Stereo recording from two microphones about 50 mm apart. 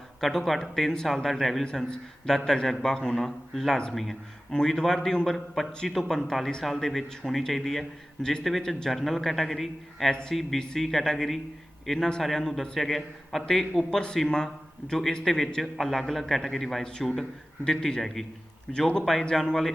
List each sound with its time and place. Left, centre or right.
0.2 s a man's voice: centre
1.6 s a man's voice: centre
14.3 s a man's voice: centre
16.8 s speech: centre